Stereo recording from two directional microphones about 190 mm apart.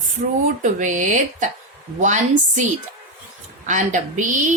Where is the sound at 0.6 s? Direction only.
40° right (ahead or behind).